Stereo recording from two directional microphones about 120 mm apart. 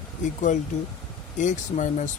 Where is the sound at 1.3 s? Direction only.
90° left.